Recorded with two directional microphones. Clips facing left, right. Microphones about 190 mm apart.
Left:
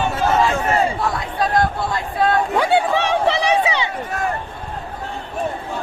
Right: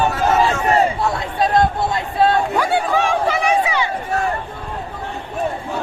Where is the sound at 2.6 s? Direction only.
25° left (ahead or behind).